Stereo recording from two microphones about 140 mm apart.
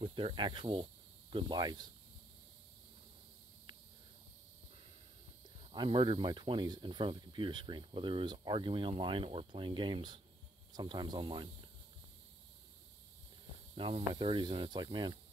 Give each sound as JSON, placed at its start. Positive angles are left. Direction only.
{"t": 0.0, "sound": "speech", "side_deg": -40}
{"t": 5.6, "sound": "speech", "side_deg": -35}
{"t": 13.7, "sound": "speech", "side_deg": -40}